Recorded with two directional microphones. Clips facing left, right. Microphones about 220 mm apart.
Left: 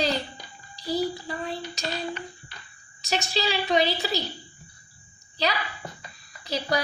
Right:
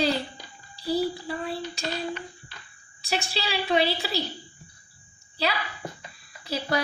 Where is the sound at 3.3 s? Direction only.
5° right (ahead or behind).